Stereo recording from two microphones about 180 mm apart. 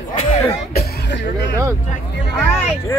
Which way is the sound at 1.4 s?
15° right (ahead or behind).